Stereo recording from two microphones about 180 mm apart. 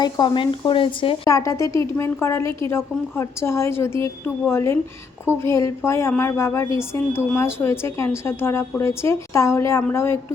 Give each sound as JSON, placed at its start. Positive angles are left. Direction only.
{"t": 0.0, "sound": "speech", "side_deg": 25}
{"t": 1.3, "sound": "a woman's voice", "side_deg": 15}